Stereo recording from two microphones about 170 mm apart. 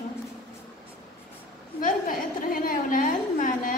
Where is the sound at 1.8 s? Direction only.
55° left (ahead or behind).